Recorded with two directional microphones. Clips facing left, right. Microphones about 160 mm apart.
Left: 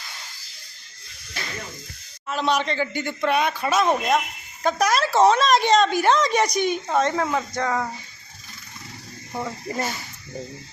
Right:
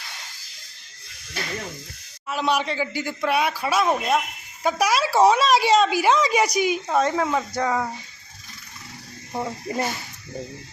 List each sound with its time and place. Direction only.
2.3 s a woman's voice: 10° right (ahead or behind)
9.3 s speech: 20° right (ahead or behind)